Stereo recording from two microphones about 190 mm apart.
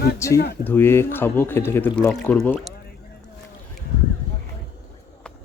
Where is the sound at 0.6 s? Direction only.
10° left (ahead or behind).